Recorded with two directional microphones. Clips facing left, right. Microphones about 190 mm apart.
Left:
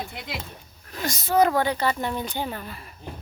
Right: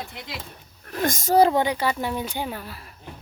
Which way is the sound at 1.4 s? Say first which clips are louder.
Right 2 dB; 20° right (ahead or behind).